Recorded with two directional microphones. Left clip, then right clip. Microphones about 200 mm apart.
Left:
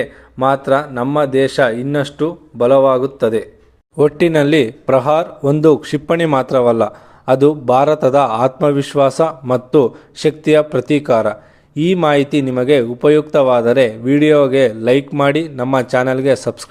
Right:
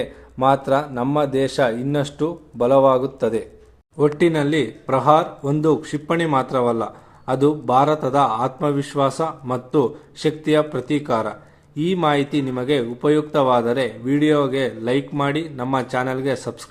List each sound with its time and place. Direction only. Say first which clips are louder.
0.0 s a man's voice: left 3 dB; 15° left (ahead or behind)
3.9 s speech: left 6 dB; 40° left (ahead or behind)